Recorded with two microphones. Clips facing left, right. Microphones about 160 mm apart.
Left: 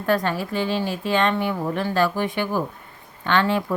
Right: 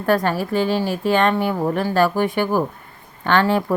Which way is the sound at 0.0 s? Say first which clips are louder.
Right 3 dB; 45° right (ahead or behind).